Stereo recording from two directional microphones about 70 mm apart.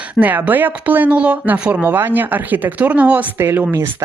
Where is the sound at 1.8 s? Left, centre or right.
Right.